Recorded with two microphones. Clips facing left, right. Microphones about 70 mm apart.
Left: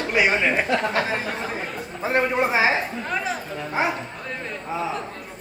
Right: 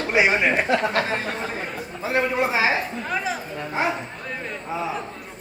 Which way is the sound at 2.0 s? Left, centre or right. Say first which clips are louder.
Left 1 dB; left.